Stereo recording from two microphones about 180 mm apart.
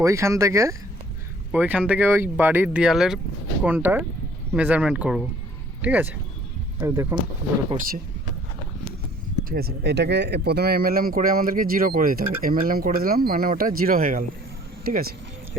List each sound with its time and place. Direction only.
0.0 s speech: 15° right (ahead or behind)
9.5 s speech: 60° right (ahead or behind)